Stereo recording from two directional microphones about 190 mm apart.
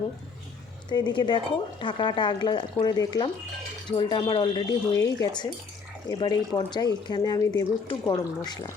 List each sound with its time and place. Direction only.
0.9 s speech: 25° left (ahead or behind)